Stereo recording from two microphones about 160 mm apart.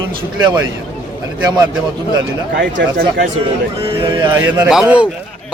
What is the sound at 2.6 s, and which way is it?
Speech, 75° right (ahead or behind).